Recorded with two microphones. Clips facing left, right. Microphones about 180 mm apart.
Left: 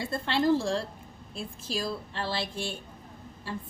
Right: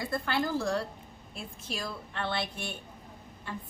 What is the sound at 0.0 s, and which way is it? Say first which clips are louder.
A woman's voice: left 4 dB; 25° left (ahead or behind).